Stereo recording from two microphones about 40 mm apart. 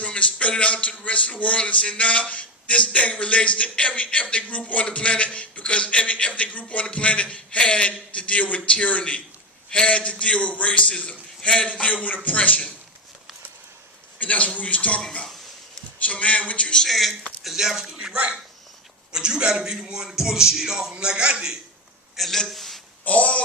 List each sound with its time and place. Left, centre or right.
0.1 s a man's voice: left
11.7 s a man's voice: left
14.2 s a man's voice: left
16.0 s a man's voice: left
16.8 s speech: centre
19.1 s speech: centre
20.9 s a man's voice: right
22.1 s a man's voice: centre
23.0 s a man's voice: left